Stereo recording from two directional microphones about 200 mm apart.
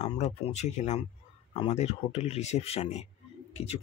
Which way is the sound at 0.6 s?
35° left (ahead or behind).